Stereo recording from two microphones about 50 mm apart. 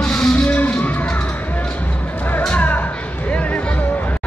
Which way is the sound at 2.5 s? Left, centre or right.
Left.